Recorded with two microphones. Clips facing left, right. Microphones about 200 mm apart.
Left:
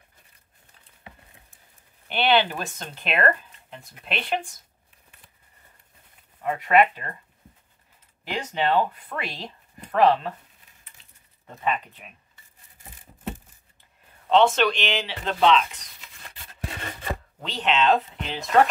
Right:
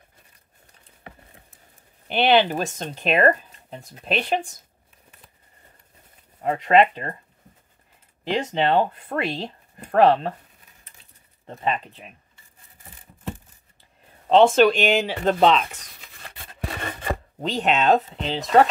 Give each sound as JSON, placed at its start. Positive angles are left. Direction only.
{"t": 2.0, "sound": "speech", "side_deg": -40}
{"t": 6.4, "sound": "speech", "side_deg": -25}
{"t": 8.2, "sound": "speech", "side_deg": -25}
{"t": 8.6, "sound": "speech", "side_deg": -40}
{"t": 11.4, "sound": "speech", "side_deg": -30}
{"t": 14.2, "sound": "speech", "side_deg": -40}
{"t": 16.3, "sound": "rub", "side_deg": -55}
{"t": 17.4, "sound": "speech", "side_deg": -45}
{"t": 18.1, "sound": "speech", "side_deg": -30}